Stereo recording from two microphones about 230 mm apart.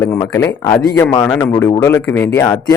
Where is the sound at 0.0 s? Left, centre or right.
Centre.